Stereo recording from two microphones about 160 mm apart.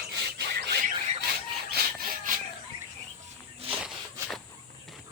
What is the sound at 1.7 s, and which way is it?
Sawing, 70° right (ahead or behind).